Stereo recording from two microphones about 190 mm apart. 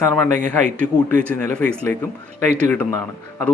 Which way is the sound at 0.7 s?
45° right (ahead or behind).